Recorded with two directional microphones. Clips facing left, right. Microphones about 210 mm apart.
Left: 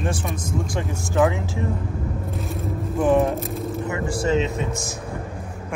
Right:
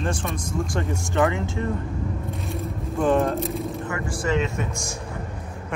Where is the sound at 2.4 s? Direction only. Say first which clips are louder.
Left 2 dB; centre (ahead or behind).